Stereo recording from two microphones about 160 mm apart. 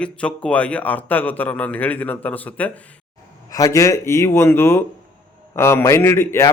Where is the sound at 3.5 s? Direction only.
20° left (ahead or behind).